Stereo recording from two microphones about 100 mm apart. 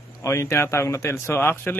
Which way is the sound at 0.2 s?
25° left (ahead or behind).